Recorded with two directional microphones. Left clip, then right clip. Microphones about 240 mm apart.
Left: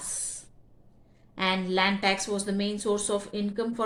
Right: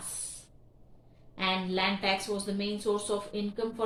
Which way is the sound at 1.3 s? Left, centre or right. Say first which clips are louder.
Left 4 dB; left.